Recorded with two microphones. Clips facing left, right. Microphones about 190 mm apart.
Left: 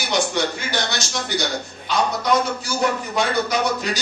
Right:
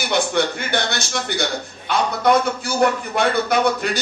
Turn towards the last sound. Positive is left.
turn(degrees=-55)  # may be behind; listen again after turning